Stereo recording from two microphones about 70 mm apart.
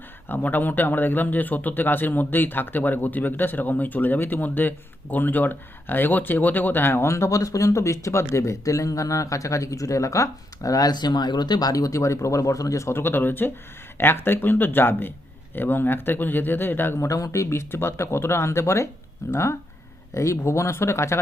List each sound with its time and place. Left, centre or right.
0.3 s speech: left
17.1 s speech: left